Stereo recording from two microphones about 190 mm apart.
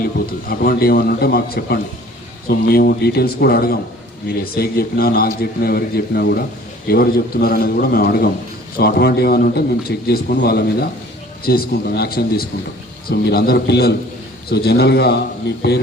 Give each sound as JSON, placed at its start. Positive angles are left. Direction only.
{"t": 0.5, "sound": "a man's voice", "side_deg": 50}